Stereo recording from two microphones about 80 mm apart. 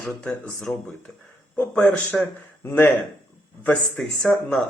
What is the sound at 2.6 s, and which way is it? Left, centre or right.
Speech, left.